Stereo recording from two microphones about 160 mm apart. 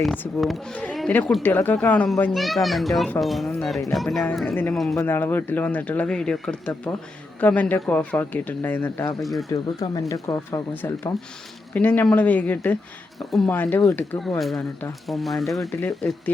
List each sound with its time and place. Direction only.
0.2 s speech: centre (ahead or behind)
4.9 s speech: 15° left (ahead or behind)
9.2 s speech: centre (ahead or behind)
9.9 s speech: 20° left (ahead or behind); by 13.5 s centre (ahead or behind)
13.5 s speech: 10° left (ahead or behind)
14.2 s speech: centre (ahead or behind)